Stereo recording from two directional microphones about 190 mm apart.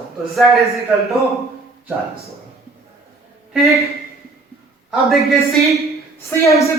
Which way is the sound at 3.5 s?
Centre (ahead or behind).